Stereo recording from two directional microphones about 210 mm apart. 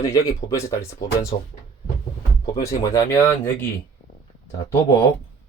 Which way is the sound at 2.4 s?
15° left (ahead or behind).